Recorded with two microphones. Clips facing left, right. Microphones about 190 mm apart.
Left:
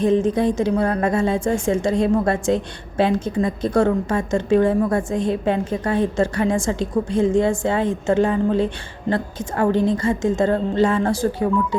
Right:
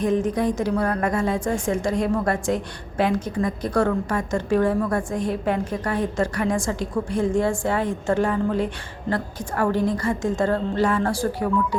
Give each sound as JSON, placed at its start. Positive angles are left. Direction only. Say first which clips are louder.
{"t": 0.0, "sound": "a woman's voice", "louder": "left 4 dB", "side_deg": 25}